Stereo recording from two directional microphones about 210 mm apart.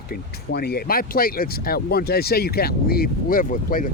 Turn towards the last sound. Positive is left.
turn(degrees=40)  # may be behind; listen again after turning